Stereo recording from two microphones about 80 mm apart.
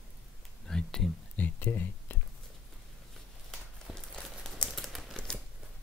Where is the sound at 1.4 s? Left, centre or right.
Left.